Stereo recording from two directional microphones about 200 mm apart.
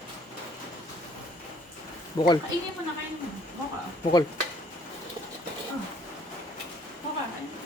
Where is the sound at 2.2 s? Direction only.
20° left (ahead or behind).